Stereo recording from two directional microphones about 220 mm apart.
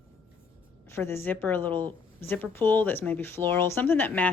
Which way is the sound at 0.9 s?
10° left (ahead or behind).